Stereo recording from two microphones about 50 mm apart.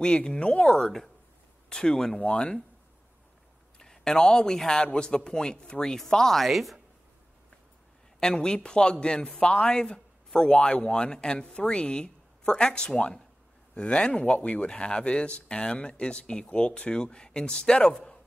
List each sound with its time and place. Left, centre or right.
0.0 s speech: centre
3.7 s speech: centre
8.2 s speech: centre
9.9 s a sound: centre
10.7 s speech: centre